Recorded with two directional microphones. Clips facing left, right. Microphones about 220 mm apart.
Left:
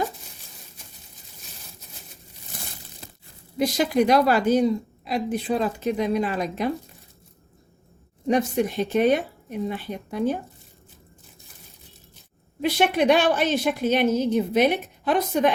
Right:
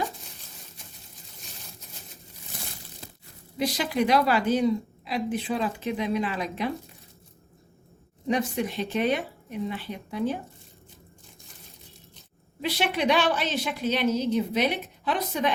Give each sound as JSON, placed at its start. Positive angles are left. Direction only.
{"t": 3.6, "sound": "a woman's voice", "side_deg": 45}
{"t": 8.3, "sound": "a woman's voice", "side_deg": 45}
{"t": 12.6, "sound": "a woman's voice", "side_deg": 50}